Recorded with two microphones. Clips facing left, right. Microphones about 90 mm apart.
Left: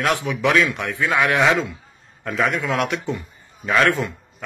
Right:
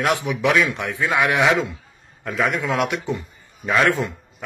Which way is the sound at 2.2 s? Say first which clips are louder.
Left 1 dB; 5° right (ahead or behind).